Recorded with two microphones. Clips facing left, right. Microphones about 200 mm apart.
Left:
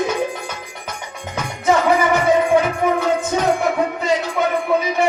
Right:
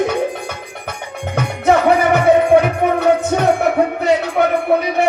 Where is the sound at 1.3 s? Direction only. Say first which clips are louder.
Right 3 dB; 60° right (ahead or behind).